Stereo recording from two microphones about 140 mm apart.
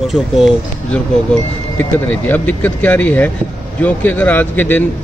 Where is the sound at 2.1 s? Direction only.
10° left (ahead or behind).